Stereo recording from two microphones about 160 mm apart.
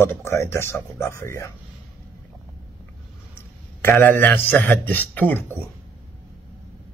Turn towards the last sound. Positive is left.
turn(degrees=10)  # may be behind; listen again after turning